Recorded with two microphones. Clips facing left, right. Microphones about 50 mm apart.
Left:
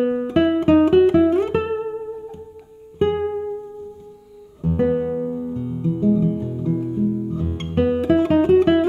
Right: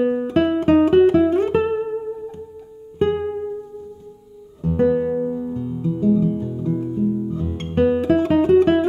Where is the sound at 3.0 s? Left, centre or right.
Centre.